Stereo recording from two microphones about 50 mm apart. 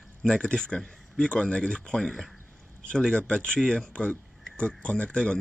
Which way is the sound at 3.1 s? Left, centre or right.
Left.